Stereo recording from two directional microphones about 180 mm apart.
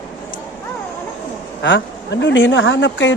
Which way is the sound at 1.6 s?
80° left.